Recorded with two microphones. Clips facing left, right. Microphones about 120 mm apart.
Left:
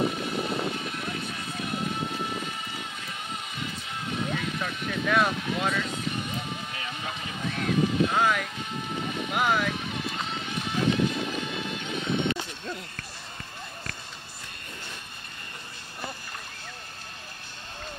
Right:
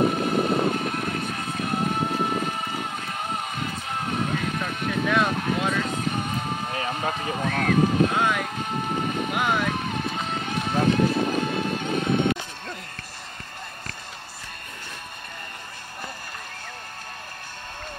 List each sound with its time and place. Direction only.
0.0 s vehicle: 50° right (ahead or behind)
5.0 s speech: centre (ahead or behind)
5.3 s speech: 50° right (ahead or behind)
5.8 s a sound: 50° right (ahead or behind)
8.1 s speech: centre (ahead or behind)
8.5 s music: 50° right (ahead or behind)
9.3 s speech: centre (ahead or behind)
9.8 s music: 50° right (ahead or behind)